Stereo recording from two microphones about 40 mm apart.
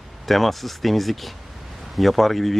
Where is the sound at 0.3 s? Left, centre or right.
Centre.